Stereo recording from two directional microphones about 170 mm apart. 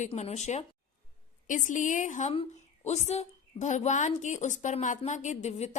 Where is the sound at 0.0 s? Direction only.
40° left (ahead or behind).